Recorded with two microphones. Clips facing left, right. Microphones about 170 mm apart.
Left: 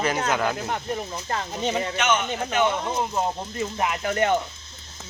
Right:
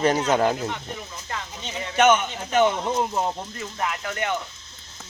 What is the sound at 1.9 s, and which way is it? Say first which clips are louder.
Speech: right 10 dB; 50° right (ahead or behind).